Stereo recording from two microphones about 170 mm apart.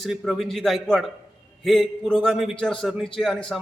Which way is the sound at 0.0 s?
Centre (ahead or behind).